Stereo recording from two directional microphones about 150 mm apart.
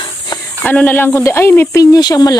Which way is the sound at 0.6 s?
10° left (ahead or behind).